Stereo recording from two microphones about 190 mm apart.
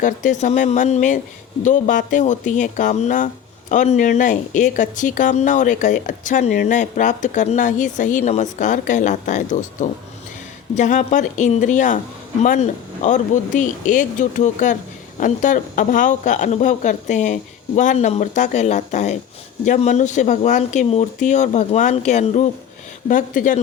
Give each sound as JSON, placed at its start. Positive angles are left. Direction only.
{"t": 0.0, "sound": "speech", "side_deg": 40}